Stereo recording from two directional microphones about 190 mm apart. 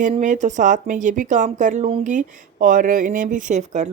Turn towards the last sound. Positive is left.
turn(degrees=-40)  # may be behind; listen again after turning